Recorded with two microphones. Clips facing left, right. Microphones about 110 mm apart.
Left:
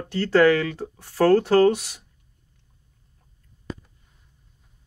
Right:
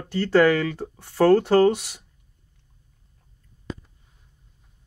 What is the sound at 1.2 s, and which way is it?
Speech, 15° right (ahead or behind).